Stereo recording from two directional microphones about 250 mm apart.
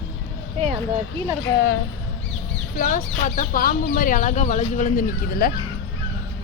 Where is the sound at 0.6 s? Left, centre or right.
Right.